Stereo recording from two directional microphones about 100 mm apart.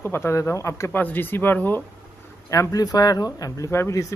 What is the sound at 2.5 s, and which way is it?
Speech, 35° left (ahead or behind).